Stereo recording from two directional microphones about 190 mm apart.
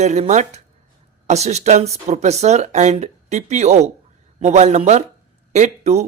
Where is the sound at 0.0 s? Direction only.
35° right (ahead or behind).